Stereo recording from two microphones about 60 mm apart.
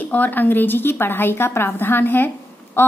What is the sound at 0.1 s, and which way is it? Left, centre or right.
A woman's voice, left.